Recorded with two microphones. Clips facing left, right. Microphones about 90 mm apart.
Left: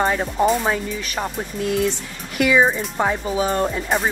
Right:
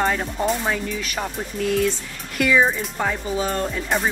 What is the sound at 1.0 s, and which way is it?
Speech, 5° left (ahead or behind).